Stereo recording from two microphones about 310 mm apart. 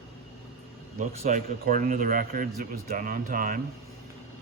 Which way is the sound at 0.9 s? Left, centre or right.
Right.